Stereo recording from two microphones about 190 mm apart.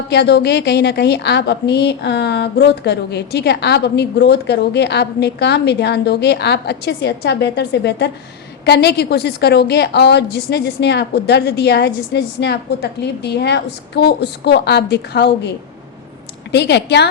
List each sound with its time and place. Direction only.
0.1 s a woman's voice: 60° left (ahead or behind)